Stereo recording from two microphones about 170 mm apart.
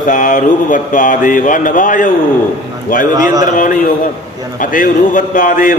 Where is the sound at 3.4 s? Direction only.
50° left (ahead or behind).